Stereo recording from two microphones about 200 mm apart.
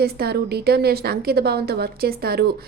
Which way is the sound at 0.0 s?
50° right (ahead or behind).